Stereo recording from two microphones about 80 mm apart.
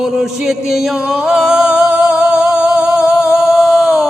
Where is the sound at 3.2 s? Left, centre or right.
Centre.